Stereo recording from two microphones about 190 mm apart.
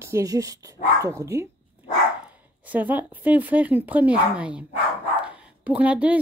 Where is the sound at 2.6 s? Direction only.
10° right (ahead or behind).